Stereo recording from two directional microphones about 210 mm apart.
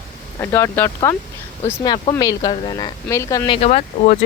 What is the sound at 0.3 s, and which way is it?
Speech, 10° left (ahead or behind).